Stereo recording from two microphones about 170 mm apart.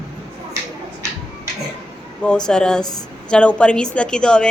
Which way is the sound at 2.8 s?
20° left (ahead or behind).